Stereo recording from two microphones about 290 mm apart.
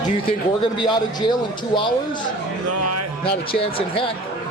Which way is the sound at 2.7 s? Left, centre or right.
Right.